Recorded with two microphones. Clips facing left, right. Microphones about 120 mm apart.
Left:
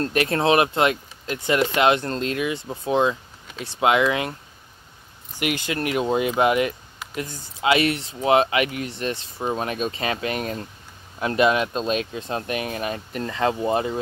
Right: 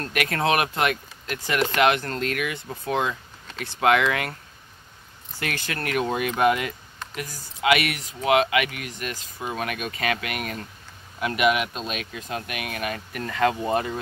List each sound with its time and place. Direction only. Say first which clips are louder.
0.0 s speech: left 4 dB; 30° left (ahead or behind)
5.4 s speech: left 5 dB; 15° left (ahead or behind)